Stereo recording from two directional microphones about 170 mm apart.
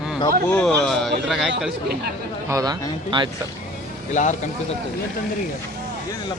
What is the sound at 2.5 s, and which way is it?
Speech, 25° right (ahead or behind).